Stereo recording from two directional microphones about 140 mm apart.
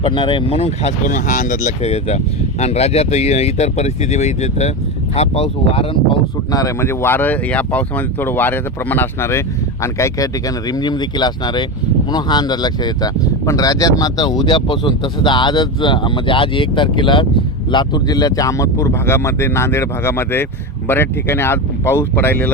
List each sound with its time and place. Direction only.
0.0 s speech: 35° left (ahead or behind)
1.0 s speech: 70° left (ahead or behind); by 6.0 s 45° left (ahead or behind)
6.5 s speech: 25° left (ahead or behind)